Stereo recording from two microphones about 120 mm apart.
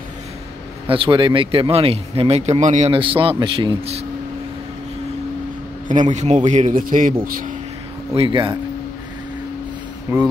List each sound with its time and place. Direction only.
0.8 s speech: 45° right (ahead or behind); by 2.9 s 80° right
2.9 s speech: 50° right (ahead or behind)
5.9 s a man's voice: 85° right
8.1 s speech: 45° right (ahead or behind)
10.1 s speech: 25° right (ahead or behind)